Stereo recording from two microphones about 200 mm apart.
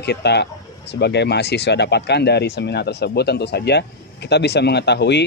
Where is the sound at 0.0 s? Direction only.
55° left (ahead or behind).